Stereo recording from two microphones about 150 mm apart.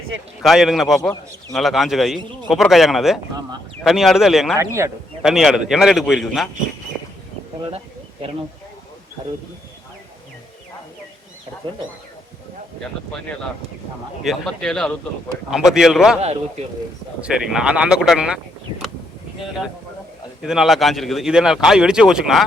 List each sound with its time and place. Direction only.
0.4 s speech: centre (ahead or behind)
4.5 s speech: 20° right (ahead or behind)
5.2 s speech: centre (ahead or behind)
11.6 s speech: 35° right (ahead or behind)
14.3 s speech: 5° left (ahead or behind)
17.2 s speech: 5° right (ahead or behind)
20.4 s speech: centre (ahead or behind)